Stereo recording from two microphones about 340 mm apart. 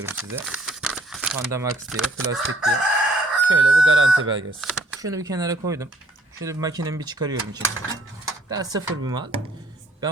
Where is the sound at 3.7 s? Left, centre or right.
Right.